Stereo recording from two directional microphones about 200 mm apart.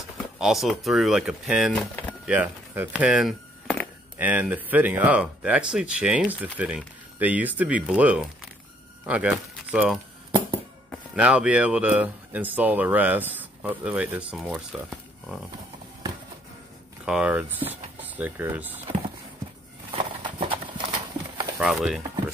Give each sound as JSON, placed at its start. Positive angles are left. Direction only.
{"t": 0.4, "sound": "speech", "side_deg": 0}
{"t": 2.3, "sound": "speech", "side_deg": -10}
{"t": 11.1, "sound": "speech", "side_deg": -5}
{"t": 17.0, "sound": "speech", "side_deg": -5}
{"t": 19.9, "sound": "clip-clop", "side_deg": -25}
{"t": 21.5, "sound": "speech", "side_deg": -5}